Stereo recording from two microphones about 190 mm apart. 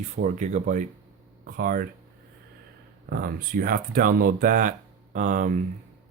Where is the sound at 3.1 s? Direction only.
50° right (ahead or behind).